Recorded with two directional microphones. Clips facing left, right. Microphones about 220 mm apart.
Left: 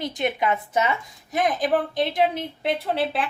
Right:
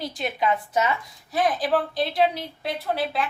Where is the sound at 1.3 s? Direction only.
20° left (ahead or behind).